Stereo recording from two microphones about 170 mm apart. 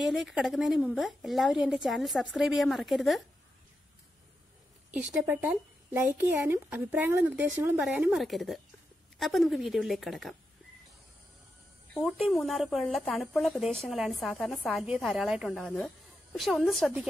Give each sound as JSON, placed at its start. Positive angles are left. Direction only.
{"t": 0.0, "sound": "speech", "side_deg": 0}
{"t": 5.1, "sound": "speech", "side_deg": -10}
{"t": 11.9, "sound": "speech", "side_deg": 0}